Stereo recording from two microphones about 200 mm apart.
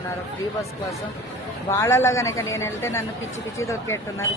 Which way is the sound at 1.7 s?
15° left (ahead or behind).